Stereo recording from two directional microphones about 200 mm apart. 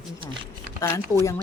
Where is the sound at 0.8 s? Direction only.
15° left (ahead or behind).